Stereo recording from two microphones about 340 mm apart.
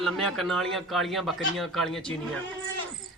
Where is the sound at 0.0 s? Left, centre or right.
Centre.